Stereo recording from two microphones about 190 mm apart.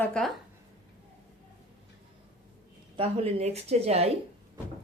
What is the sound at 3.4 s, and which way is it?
Speech, 35° right (ahead or behind).